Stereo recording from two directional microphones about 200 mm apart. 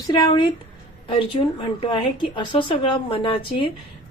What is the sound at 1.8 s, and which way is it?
A woman's voice, 25° left (ahead or behind).